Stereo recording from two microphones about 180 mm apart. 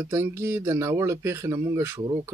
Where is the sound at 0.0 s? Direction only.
15° right (ahead or behind).